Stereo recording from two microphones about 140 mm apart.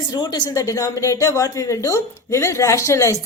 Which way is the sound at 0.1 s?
30° left (ahead or behind).